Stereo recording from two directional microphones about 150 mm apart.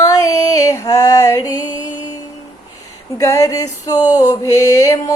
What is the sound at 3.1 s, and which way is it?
Music, 20° left (ahead or behind).